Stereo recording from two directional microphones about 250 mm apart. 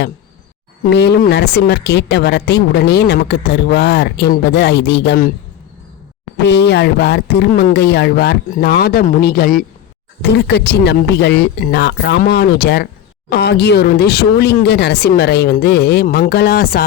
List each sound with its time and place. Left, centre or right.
0.9 s speech: left
6.3 s speech: left